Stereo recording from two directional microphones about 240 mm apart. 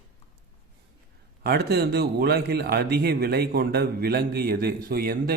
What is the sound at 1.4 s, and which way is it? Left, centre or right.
A man's voice, right.